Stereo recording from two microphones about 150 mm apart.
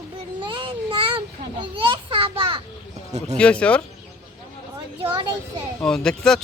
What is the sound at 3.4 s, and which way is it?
Speech, 10° left (ahead or behind).